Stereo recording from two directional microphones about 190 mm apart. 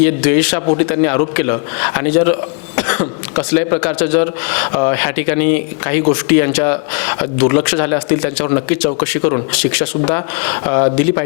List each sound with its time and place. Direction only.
0.0 s speech: 10° left (ahead or behind)
10.7 s speech: 20° left (ahead or behind)